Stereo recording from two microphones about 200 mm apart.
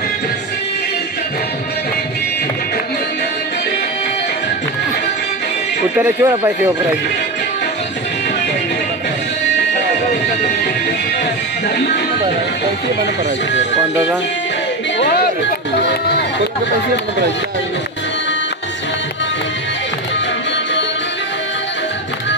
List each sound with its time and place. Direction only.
5.9 s speech: 10° right (ahead or behind)
15.0 s music: 50° left (ahead or behind)